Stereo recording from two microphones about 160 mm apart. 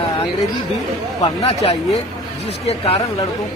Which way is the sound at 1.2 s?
35° left (ahead or behind).